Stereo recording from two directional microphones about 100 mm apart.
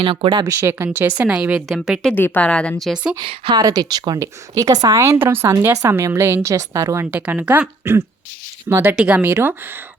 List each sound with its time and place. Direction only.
0.0 s speech: 60° right (ahead or behind)
0.4 s speech: 25° right (ahead or behind)
1.2 s a woman's voice: 10° right (ahead or behind)
2.1 s speech: 20° left (ahead or behind)
2.8 s a woman's voice: 10° right (ahead or behind)
3.5 s a woman's voice: 40° right (ahead or behind)
7.1 s a woman's voice: 15° right (ahead or behind)
8.7 s a woman's voice: 20° right (ahead or behind)